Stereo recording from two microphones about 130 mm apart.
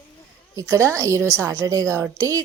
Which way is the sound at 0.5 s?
25° right (ahead or behind).